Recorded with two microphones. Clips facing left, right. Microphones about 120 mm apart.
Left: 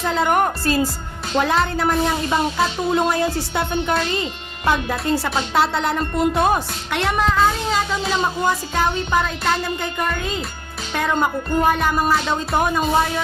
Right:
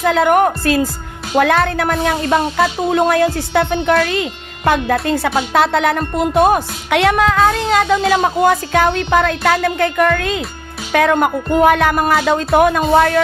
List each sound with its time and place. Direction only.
0.0 s speech: 55° right (ahead or behind)
12.9 s speech: 75° right (ahead or behind)